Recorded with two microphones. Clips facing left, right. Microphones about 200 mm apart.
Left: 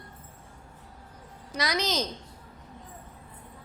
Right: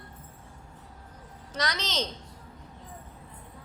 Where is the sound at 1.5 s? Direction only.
10° left (ahead or behind).